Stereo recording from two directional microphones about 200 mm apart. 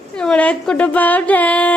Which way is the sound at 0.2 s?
5° left (ahead or behind).